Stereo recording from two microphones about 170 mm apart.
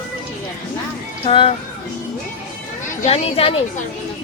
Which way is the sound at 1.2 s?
30° left (ahead or behind).